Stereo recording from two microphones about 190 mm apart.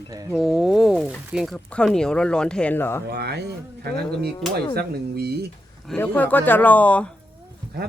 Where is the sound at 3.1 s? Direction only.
60° right (ahead or behind).